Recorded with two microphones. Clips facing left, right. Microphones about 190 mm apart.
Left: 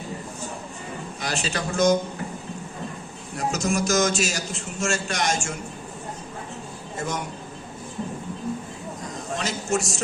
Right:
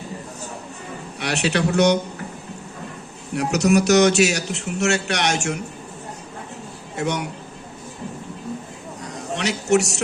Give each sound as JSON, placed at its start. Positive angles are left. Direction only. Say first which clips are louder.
{"t": 1.2, "sound": "a man's voice", "louder": "right 7 dB", "side_deg": -70}
{"t": 3.3, "sound": "a man's voice", "louder": "right 7 dB", "side_deg": -70}
{"t": 6.9, "sound": "a man's voice", "louder": "right 5 dB", "side_deg": -70}
{"t": 9.3, "sound": "a man's voice", "louder": "right 7 dB", "side_deg": -70}